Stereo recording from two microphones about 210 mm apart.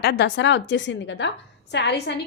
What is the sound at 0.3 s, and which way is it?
A woman's voice, 60° left (ahead or behind).